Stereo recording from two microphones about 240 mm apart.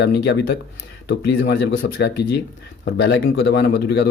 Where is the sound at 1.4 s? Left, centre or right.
Left.